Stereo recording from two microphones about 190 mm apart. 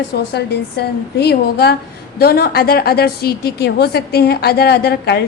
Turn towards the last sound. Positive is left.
turn(degrees=60)  # may be behind; listen again after turning